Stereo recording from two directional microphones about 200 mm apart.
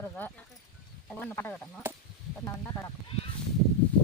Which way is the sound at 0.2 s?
10° left (ahead or behind).